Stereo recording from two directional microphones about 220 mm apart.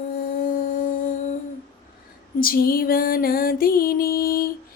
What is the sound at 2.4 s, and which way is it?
Music, 40° left (ahead or behind).